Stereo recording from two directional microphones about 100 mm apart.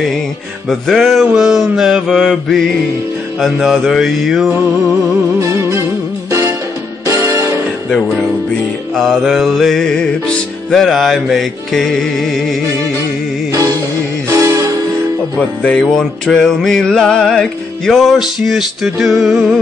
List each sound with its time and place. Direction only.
0.7 s music: centre (ahead or behind)
5.4 s music: 30° right (ahead or behind)
7.1 s music: 30° right (ahead or behind)
8.9 s music: centre (ahead or behind)
13.5 s music: 35° right (ahead or behind)
15.3 s music: 5° left (ahead or behind)